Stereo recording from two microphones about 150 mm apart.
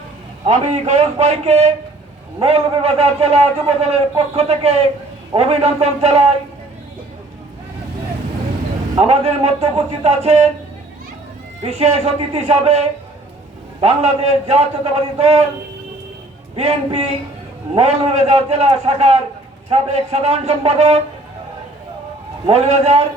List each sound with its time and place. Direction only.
0.4 s a man's voice: 50° right (ahead or behind)
9.0 s a man's voice: 45° right (ahead or behind)
11.6 s a man's voice: 45° right (ahead or behind)
13.8 s a man's voice: 45° right (ahead or behind)
16.6 s a man's voice: 45° right (ahead or behind)
22.4 s a man's voice: 45° right (ahead or behind)